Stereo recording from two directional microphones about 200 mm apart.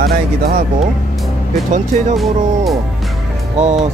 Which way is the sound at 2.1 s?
Centre (ahead or behind).